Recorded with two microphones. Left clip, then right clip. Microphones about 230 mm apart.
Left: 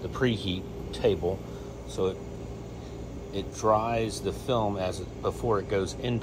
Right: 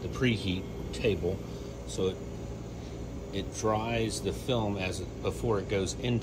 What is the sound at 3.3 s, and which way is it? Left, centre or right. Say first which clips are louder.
Speech: left 6 dB; centre.